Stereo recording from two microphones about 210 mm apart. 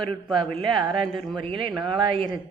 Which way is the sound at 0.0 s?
25° right (ahead or behind).